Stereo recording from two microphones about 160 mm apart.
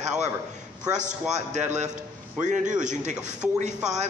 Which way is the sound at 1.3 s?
45° right (ahead or behind).